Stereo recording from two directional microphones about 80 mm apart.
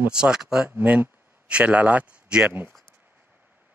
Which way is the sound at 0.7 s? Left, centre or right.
Centre.